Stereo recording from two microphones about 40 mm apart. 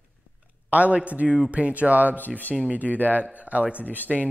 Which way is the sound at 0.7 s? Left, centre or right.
Right.